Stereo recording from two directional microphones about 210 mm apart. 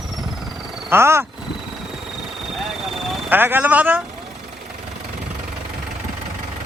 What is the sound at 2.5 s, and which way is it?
Vehicle, centre (ahead or behind).